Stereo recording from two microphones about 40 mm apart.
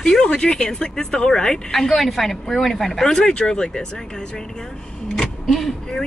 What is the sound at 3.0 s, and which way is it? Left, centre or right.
Speech, centre.